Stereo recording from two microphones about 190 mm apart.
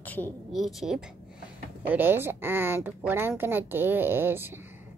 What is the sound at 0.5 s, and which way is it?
Speech, centre (ahead or behind).